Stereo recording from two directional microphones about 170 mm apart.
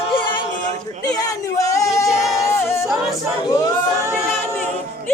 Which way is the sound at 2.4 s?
15° left (ahead or behind).